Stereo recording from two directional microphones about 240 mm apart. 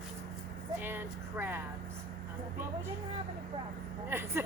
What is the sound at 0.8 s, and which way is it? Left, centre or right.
Speech, centre.